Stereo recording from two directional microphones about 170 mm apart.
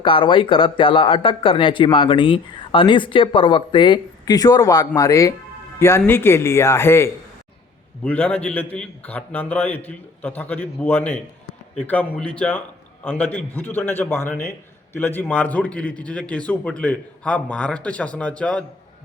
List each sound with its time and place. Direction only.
0.0 s a man's voice: 30° left (ahead or behind); by 18.6 s 5° left (ahead or behind)